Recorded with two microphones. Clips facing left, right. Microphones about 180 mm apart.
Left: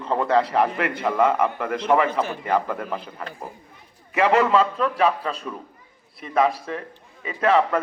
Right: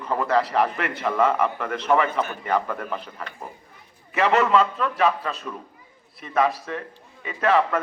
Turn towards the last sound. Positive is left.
turn(degrees=30)  # may be behind; listen again after turning